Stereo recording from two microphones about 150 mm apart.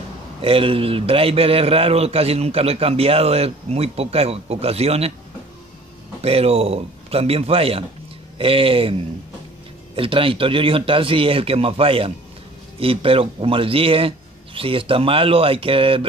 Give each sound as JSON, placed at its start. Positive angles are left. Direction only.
{"t": 0.4, "sound": "a man's voice", "side_deg": -35}
{"t": 6.2, "sound": "a man's voice", "side_deg": -40}